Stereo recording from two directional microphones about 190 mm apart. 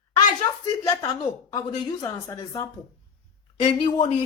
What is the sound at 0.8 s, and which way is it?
A woman's voice, 20° left (ahead or behind).